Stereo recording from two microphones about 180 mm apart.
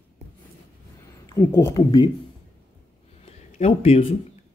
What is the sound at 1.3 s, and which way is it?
Speech, 15° left (ahead or behind).